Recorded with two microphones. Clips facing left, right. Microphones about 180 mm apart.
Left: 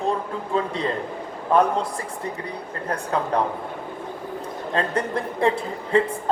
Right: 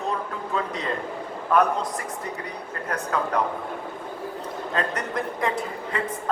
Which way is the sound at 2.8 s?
30° left (ahead or behind).